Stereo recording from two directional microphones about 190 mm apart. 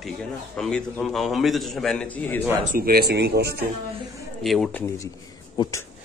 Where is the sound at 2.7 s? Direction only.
55° right (ahead or behind).